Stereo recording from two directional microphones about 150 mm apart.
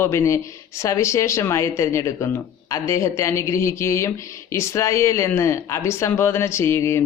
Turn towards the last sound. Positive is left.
turn(degrees=15)  # may be behind; listen again after turning